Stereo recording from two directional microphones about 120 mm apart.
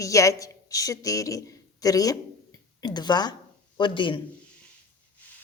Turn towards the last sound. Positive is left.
turn(degrees=45)  # may be behind; listen again after turning